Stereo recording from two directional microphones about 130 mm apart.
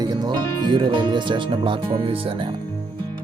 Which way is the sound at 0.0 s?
30° right (ahead or behind).